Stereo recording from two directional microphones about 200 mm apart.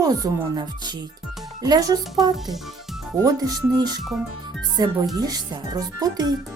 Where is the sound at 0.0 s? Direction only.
20° right (ahead or behind).